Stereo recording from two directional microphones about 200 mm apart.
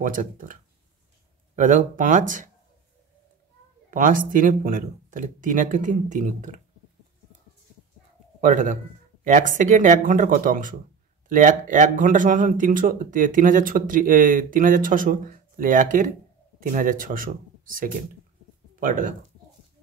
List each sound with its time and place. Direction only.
0.0 s speech: 40° right (ahead or behind)
3.9 s speech: 45° right (ahead or behind)
8.4 s a man's voice: 40° right (ahead or behind)